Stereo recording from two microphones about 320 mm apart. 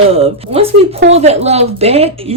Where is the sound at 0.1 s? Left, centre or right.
Centre.